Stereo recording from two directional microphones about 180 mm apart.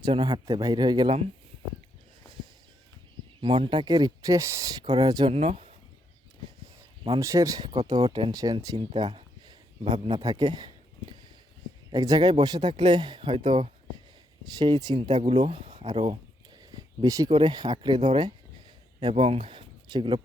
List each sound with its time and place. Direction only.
0.0 s speech: 25° right (ahead or behind)
3.4 s speech: 25° right (ahead or behind)
5.3 s speech: 35° right (ahead or behind)
7.2 s speech: 15° right (ahead or behind)
10.2 s speech: 20° right (ahead or behind); by 15.9 s 35° right (ahead or behind)
16.7 s a sound: 20° right (ahead or behind)
17.3 s speech: 25° right (ahead or behind)
19.1 s speech: 30° right (ahead or behind)